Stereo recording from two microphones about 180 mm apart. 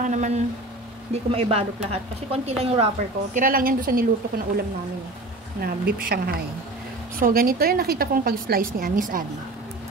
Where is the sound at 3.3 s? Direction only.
50° right (ahead or behind).